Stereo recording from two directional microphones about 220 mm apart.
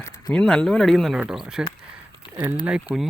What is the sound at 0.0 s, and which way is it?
Speech, 10° left (ahead or behind).